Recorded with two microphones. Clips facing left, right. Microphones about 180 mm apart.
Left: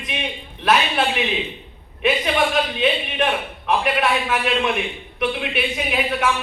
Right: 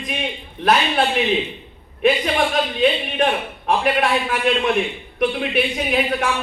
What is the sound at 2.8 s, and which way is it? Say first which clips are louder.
A man's voice: right 3 dB; 45° right (ahead or behind).